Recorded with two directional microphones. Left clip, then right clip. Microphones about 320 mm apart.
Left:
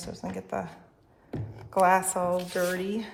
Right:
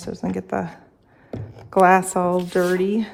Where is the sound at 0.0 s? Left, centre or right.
Right.